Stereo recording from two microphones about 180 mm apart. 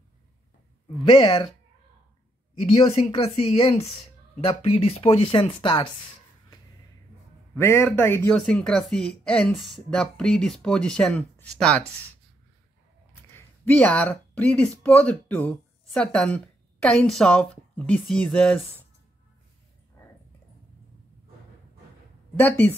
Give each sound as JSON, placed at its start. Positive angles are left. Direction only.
{"t": 1.0, "sound": "speech", "side_deg": 25}
{"t": 2.6, "sound": "speech", "side_deg": 35}
{"t": 7.5, "sound": "a man's voice", "side_deg": 15}
{"t": 13.3, "sound": "speech", "side_deg": 10}
{"t": 22.4, "sound": "a man's voice", "side_deg": 10}